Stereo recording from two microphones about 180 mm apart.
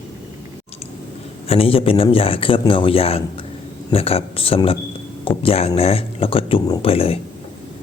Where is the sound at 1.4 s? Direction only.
30° left (ahead or behind).